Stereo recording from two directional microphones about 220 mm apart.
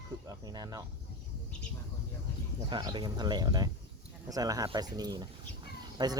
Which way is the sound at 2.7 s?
20° right (ahead or behind).